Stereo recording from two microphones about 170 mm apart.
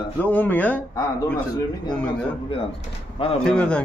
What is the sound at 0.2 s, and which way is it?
Speech, 10° left (ahead or behind).